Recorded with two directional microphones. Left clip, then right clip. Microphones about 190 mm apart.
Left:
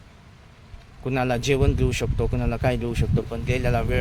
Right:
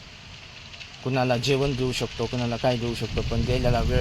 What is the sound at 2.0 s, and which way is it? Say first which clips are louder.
Speech: left 1 dB; 10° left (ahead or behind).